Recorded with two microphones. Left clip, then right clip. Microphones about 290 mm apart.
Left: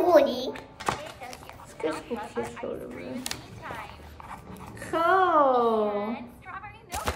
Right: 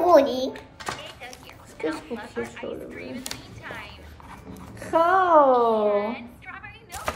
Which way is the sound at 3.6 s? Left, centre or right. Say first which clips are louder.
Right 2 dB; centre.